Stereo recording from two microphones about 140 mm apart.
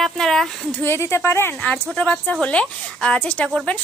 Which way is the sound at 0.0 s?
Centre (ahead or behind).